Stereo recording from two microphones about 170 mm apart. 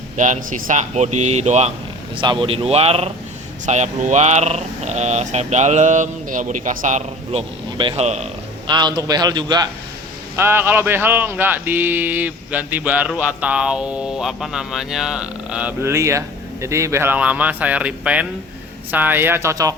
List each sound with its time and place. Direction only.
0.2 s speech: 45° right (ahead or behind)
2.1 s speech: 30° right (ahead or behind)
8.6 s a man's voice: 25° right (ahead or behind)
10.3 s speech: 15° right (ahead or behind)